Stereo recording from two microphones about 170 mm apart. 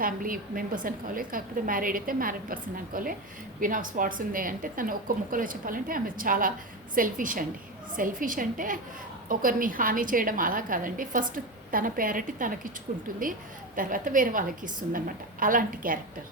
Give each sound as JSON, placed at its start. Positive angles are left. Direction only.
{"t": 0.0, "sound": "a woman's voice", "side_deg": -55}
{"t": 13.7, "sound": "speech", "side_deg": -50}